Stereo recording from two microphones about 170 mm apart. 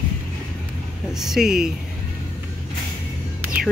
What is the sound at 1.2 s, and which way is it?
Speech, centre (ahead or behind).